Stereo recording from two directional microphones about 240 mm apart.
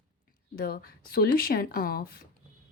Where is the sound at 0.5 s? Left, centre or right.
Left.